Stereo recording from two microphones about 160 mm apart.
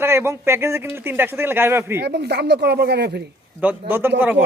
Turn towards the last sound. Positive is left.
turn(degrees=-15)  # may be behind; listen again after turning